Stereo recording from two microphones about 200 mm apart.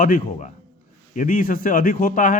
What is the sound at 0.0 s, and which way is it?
A man's voice, 40° left (ahead or behind).